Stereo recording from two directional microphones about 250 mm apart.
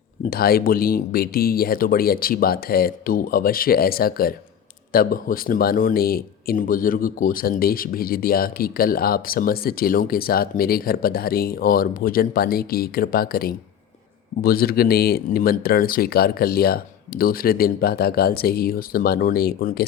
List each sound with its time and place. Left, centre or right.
0.3 s speech: left